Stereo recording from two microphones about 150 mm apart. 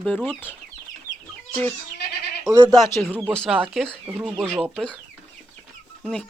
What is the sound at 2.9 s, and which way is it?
Speech, 15° left (ahead or behind).